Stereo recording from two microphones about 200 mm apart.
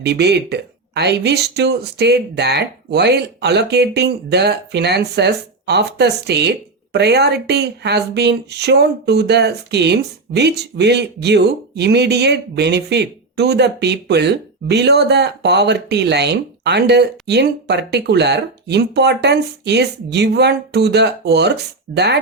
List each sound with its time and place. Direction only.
0.0 s speech: 55° right (ahead or behind)